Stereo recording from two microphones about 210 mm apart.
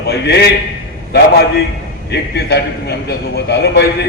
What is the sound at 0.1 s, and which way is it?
Speech, 50° left (ahead or behind).